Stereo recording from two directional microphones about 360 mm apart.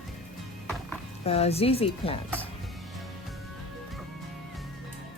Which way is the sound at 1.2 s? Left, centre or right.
Centre.